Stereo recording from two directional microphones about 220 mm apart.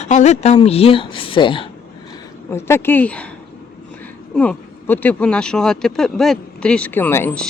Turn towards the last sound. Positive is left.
turn(degrees=5)  # may be behind; listen again after turning